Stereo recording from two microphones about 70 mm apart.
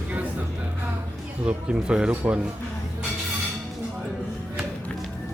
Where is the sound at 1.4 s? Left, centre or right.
Centre.